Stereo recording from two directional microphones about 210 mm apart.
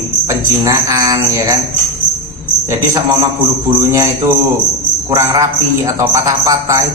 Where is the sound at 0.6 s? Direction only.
15° right (ahead or behind).